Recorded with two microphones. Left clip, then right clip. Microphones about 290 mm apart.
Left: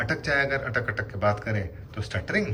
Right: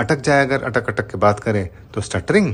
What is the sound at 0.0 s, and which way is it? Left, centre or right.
Speech, centre.